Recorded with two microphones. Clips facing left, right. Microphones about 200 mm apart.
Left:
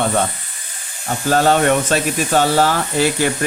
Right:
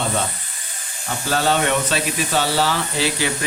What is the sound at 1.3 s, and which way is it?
Speech, 50° left (ahead or behind).